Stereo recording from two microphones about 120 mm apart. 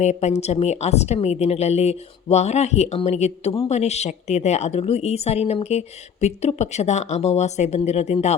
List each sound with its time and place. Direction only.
0.0 s a woman's voice: 70° left (ahead or behind)